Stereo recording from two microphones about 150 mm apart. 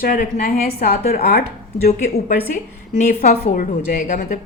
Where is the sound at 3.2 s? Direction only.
65° left (ahead or behind).